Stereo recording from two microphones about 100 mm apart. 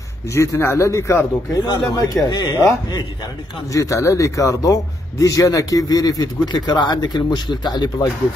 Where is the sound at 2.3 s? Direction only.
50° left (ahead or behind).